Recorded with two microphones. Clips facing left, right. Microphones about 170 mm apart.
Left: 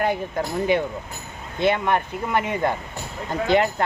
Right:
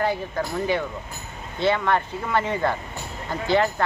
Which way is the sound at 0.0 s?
20° left (ahead or behind).